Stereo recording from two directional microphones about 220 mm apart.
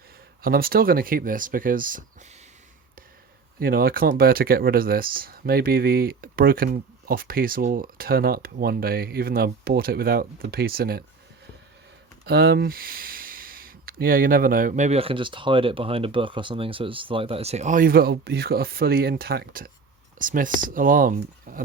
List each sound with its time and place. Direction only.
0.4 s speech: 40° right (ahead or behind)
3.6 s speech: 40° right (ahead or behind)
12.2 s speech: 45° right (ahead or behind)